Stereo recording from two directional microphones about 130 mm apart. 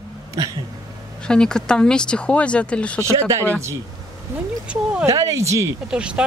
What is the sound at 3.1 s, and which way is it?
Speech, 25° right (ahead or behind).